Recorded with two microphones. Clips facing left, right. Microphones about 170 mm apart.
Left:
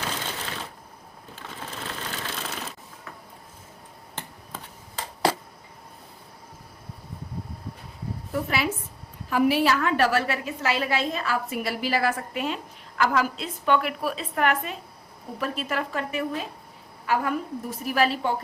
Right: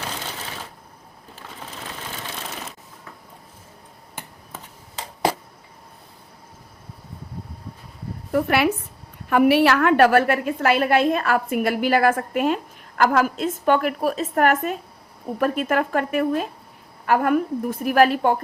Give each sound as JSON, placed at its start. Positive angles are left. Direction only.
{"t": 4.1, "sound": "finger snapping", "side_deg": -10}
{"t": 8.3, "sound": "a woman's voice", "side_deg": -65}